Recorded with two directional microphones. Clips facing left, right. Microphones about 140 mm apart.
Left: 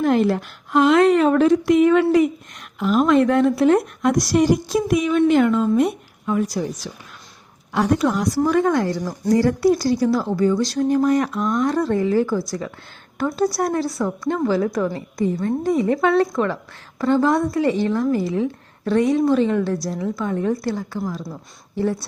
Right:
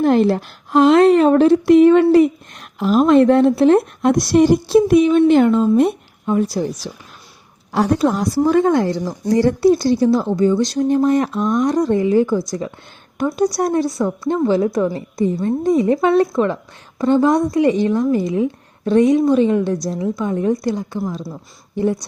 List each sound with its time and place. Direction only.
0.0 s a woman's voice: 30° right (ahead or behind)